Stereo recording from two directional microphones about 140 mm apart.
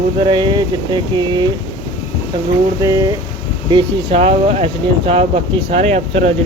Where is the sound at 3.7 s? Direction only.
40° right (ahead or behind).